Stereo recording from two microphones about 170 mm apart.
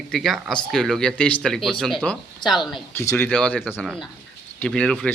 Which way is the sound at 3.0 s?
15° left (ahead or behind).